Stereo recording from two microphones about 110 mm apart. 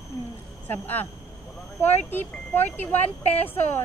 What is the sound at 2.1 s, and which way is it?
Speech, 20° left (ahead or behind).